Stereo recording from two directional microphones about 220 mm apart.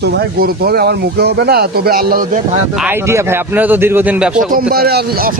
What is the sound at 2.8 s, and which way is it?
Speech, 10° right (ahead or behind).